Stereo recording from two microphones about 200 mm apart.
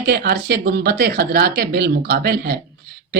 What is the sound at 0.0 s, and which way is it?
Speech, 50° right (ahead or behind).